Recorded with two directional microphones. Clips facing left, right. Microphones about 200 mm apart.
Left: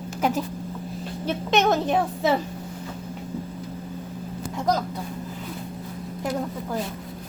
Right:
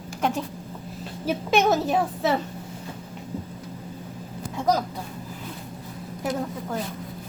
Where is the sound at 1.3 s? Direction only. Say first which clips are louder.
Even; 10° right (ahead or behind).